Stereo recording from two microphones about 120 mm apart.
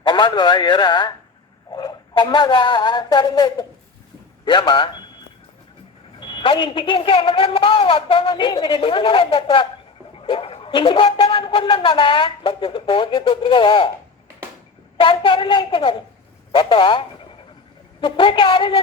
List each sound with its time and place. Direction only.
0.0 s speech: 40° left (ahead or behind)
6.1 s speech: 45° left (ahead or behind)
14.9 s speech: 50° left (ahead or behind)